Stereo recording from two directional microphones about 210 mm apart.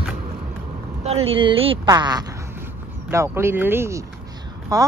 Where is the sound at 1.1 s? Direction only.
30° right (ahead or behind).